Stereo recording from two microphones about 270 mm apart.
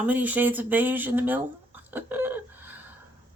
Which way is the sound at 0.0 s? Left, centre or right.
Centre.